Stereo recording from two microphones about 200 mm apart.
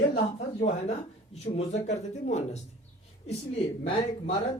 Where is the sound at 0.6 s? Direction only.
35° left (ahead or behind).